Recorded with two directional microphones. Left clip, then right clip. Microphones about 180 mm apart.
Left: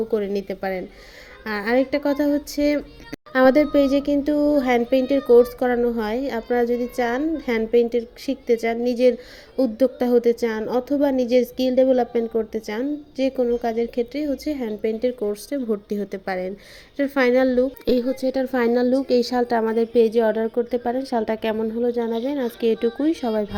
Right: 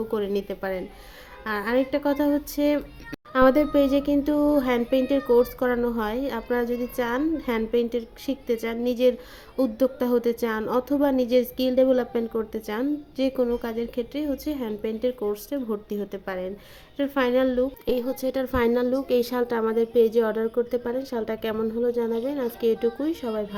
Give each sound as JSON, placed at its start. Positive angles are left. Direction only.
{"t": 0.1, "sound": "a woman's voice", "side_deg": 10}
{"t": 18.1, "sound": "a woman's voice", "side_deg": 5}
{"t": 21.5, "sound": "speech", "side_deg": 5}
{"t": 22.6, "sound": "a woman's voice", "side_deg": 15}
{"t": 22.9, "sound": "speech", "side_deg": 0}
{"t": 23.2, "sound": "a woman's voice", "side_deg": 20}